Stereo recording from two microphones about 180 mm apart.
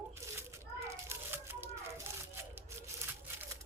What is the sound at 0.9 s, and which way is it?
Children playing, 15° right (ahead or behind).